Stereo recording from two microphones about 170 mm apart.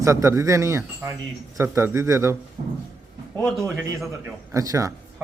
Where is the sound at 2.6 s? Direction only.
35° right (ahead or behind).